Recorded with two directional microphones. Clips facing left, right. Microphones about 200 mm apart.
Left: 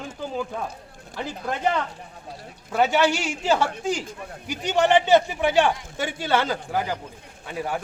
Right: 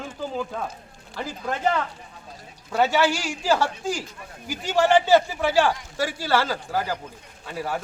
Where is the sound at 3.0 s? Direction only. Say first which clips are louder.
Left 1 dB; 20° left (ahead or behind).